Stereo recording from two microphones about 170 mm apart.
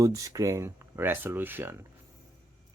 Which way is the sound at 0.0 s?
20° right (ahead or behind).